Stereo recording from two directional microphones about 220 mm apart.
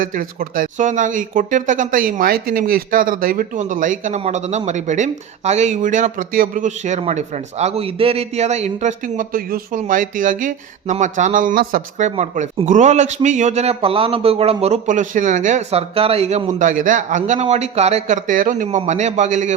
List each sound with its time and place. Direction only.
0.0 s speech: 40° right (ahead or behind)